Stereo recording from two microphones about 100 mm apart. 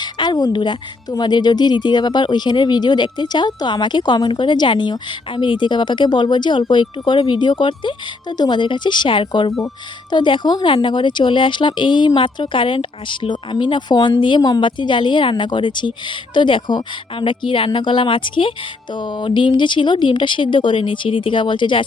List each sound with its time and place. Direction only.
0.0 s a woman's voice: 45° left (ahead or behind)
18.9 s speech: 50° left (ahead or behind)